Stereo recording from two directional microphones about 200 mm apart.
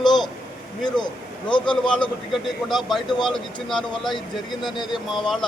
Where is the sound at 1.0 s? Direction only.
25° left (ahead or behind).